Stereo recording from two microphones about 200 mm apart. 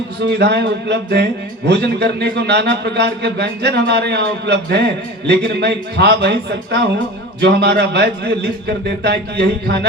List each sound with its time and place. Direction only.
0.3 s speech: 55° right (ahead or behind)